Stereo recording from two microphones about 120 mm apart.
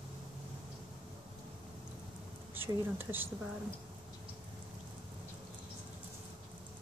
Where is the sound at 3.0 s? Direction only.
15° right (ahead or behind).